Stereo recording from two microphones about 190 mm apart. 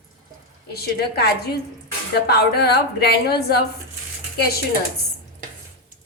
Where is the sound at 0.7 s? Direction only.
55° left (ahead or behind).